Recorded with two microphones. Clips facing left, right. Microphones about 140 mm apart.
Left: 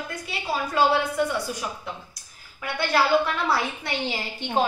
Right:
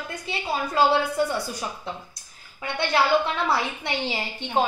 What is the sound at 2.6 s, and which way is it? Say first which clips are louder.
A woman's voice: even; 25° right (ahead or behind).